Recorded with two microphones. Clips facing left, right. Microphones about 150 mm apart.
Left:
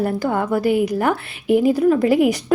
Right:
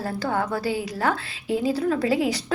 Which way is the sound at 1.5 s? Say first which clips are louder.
Left 8 dB; 65° left (ahead or behind).